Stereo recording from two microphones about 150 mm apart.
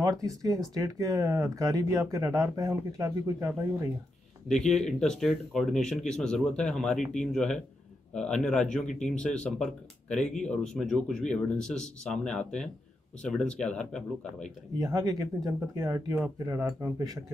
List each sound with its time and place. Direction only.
0.0 s speech: 25° right (ahead or behind)
4.5 s speech: 5° left (ahead or behind)
14.8 s speech: 25° right (ahead or behind)